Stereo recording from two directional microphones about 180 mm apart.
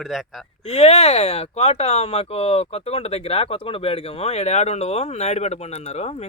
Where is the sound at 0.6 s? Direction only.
35° left (ahead or behind).